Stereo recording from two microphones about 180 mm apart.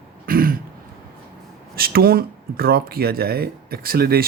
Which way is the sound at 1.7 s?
55° right (ahead or behind).